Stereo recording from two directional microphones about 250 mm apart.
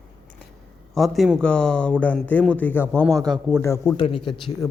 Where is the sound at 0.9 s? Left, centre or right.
Centre.